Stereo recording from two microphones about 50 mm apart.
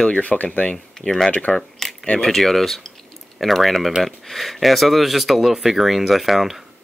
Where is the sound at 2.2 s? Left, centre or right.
Centre.